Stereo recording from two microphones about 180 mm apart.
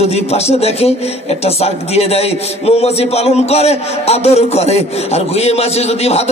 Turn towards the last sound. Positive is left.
turn(degrees=35)  # may be behind; listen again after turning